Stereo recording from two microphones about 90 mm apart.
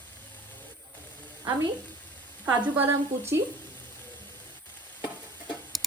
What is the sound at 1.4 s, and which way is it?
Speech, 50° right (ahead or behind).